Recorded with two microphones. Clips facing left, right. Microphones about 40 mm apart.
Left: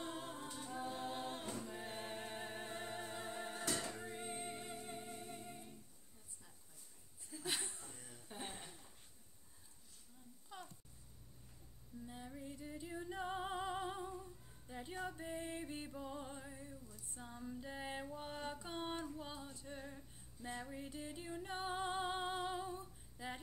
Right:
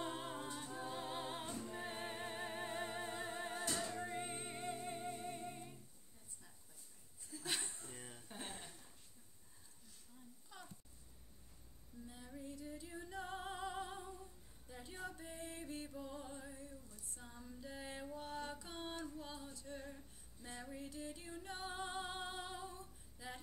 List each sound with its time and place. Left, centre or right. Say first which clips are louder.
0.0 s a capella: right 2 dB; centre
1.8 s music: right 1 dB; centre
4.0 s singing: right 2 dB; centre
7.2 s chuckle: even; centre
7.9 s a sound: right 4 dB; right
8.3 s a sound: left 2 dB; centre
10.5 s a sound: left 4 dB; centre
12.1 s music: even; centre
17.1 s female singing: left 6 dB; centre
18.0 s music: even; centre